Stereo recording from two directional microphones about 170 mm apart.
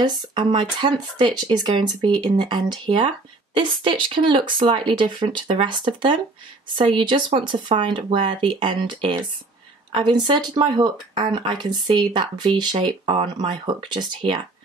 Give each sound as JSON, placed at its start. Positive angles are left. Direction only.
{"t": 0.0, "sound": "speech", "side_deg": -25}